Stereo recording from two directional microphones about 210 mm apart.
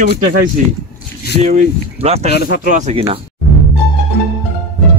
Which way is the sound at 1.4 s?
35° right (ahead or behind).